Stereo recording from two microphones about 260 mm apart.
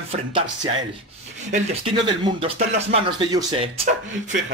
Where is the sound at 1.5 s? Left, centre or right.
Right.